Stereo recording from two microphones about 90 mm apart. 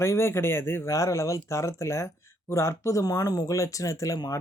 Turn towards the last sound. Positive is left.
turn(degrees=45)  # may be behind; listen again after turning